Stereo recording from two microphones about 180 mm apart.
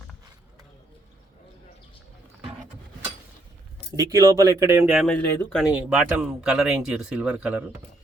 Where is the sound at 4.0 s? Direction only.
20° right (ahead or behind).